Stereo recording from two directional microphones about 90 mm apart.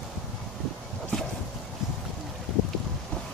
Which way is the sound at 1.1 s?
5° left (ahead or behind).